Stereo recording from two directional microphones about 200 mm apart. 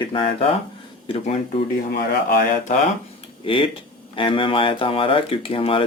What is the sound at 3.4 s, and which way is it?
Speech, 25° left (ahead or behind).